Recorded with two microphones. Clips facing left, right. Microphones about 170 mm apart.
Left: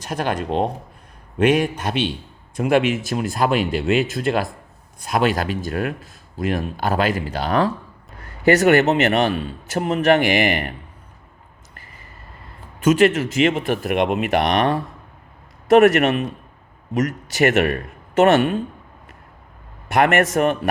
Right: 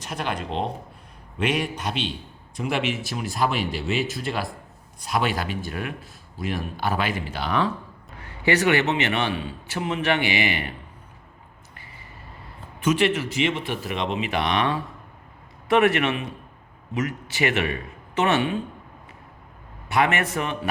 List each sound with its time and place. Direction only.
0.0 s a man's voice: 45° left (ahead or behind)
13.0 s a man's voice: 45° left (ahead or behind); by 14.5 s 65° left (ahead or behind)
14.5 s a man's voice: 45° left (ahead or behind)
19.9 s a man's voice: 50° left (ahead or behind)